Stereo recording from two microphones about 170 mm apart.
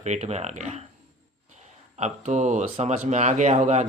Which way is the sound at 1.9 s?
45° right (ahead or behind).